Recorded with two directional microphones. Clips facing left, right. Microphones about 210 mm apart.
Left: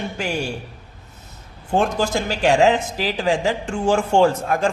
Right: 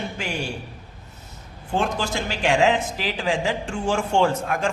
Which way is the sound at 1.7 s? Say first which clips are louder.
Left 5 dB; 45° left (ahead or behind).